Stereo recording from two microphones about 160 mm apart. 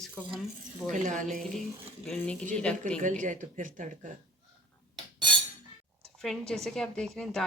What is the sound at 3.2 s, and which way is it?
Speech, 55° right (ahead or behind).